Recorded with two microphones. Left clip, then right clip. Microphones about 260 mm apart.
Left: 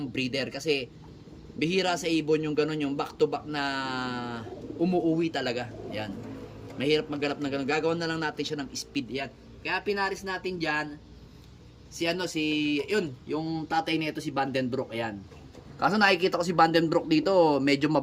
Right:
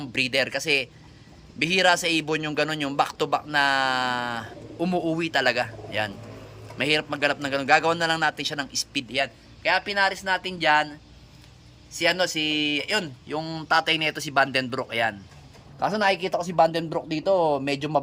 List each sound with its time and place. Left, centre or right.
0.0 s a man's voice: centre
10.2 s a man's voice: centre
11.9 s a man's voice: centre
14.7 s speech: right
15.8 s a man's voice: centre